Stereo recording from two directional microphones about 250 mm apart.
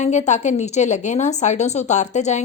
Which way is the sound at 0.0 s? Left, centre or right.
Left.